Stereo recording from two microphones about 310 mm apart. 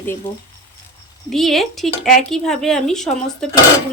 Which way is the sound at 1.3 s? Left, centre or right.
Centre.